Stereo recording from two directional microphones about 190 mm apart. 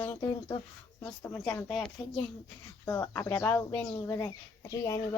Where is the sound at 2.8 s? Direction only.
15° left (ahead or behind).